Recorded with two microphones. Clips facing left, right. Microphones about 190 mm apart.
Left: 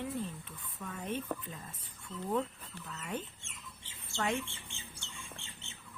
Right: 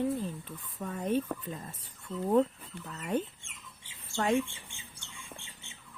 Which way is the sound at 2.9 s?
35° right (ahead or behind).